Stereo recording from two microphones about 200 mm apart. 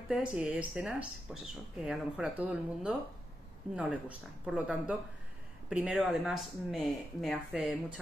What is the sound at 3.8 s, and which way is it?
Speech, 5° right (ahead or behind).